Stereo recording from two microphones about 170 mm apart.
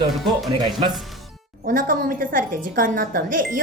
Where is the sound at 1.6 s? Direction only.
55° right (ahead or behind).